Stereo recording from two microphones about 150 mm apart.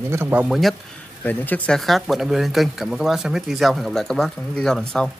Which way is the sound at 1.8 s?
Centre (ahead or behind).